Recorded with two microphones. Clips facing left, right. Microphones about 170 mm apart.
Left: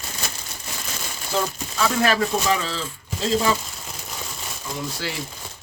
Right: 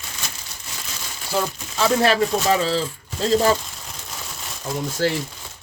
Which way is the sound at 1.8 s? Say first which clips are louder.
Right 3 dB; 30° right (ahead or behind).